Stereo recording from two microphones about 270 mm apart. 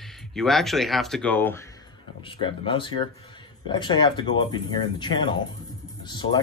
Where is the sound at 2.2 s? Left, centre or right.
Centre.